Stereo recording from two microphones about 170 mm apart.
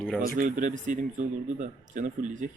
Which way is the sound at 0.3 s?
50° right (ahead or behind).